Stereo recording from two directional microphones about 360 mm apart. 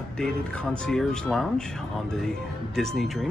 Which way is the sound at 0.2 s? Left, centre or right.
Centre.